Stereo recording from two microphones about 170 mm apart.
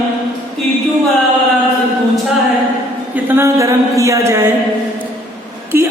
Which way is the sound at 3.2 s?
15° right (ahead or behind).